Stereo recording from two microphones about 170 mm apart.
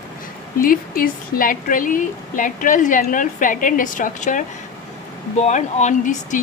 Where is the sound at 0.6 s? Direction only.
60° left (ahead or behind).